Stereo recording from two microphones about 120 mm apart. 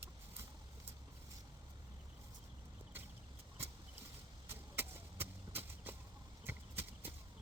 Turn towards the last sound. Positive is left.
turn(degrees=-15)  # may be behind; listen again after turning